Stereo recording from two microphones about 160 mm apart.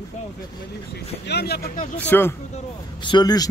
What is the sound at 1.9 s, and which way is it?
Speech, 10° left (ahead or behind).